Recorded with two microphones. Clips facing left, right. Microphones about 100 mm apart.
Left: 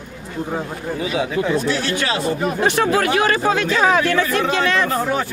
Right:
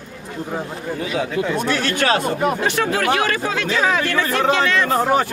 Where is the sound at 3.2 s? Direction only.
35° left (ahead or behind).